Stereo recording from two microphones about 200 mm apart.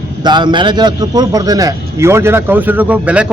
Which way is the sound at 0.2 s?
20° right (ahead or behind).